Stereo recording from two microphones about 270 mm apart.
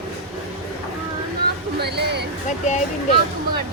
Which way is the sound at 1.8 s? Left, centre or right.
Right.